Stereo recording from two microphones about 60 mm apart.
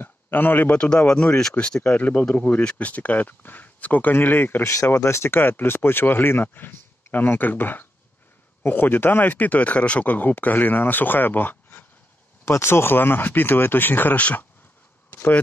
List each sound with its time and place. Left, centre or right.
0.0 s a man's voice: left; by 2.0 s centre
2.0 s speech: left
4.6 s speech: left
12.4 s speech: left
15.0 s a sound: left